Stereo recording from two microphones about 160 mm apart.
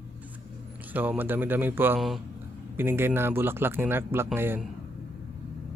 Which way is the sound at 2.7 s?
15° right (ahead or behind).